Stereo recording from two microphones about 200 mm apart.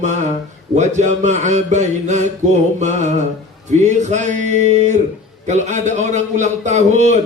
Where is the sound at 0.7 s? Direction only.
35° right (ahead or behind).